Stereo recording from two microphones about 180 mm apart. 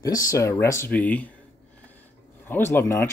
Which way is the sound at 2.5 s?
15° left (ahead or behind).